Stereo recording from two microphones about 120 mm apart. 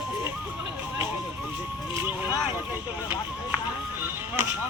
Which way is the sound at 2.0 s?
15° right (ahead or behind).